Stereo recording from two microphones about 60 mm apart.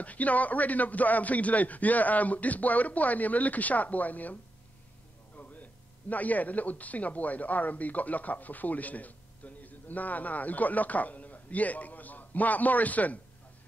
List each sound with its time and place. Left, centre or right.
0.0 s a man's voice: left